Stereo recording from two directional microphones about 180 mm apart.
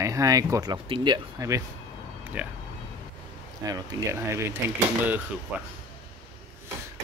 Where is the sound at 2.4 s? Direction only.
10° right (ahead or behind).